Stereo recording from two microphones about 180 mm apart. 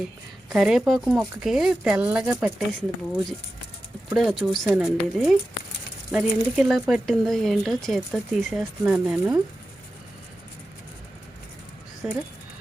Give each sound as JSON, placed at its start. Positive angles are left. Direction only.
{"t": 0.5, "sound": "speech", "side_deg": -5}
{"t": 4.1, "sound": "speech", "side_deg": 0}
{"t": 12.0, "sound": "speech", "side_deg": -5}